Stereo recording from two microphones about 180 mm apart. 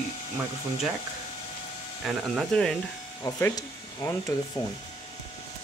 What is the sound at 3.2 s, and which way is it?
Speech, 20° left (ahead or behind).